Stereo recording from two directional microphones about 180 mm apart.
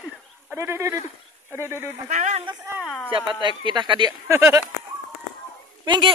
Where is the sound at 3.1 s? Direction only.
25° right (ahead or behind).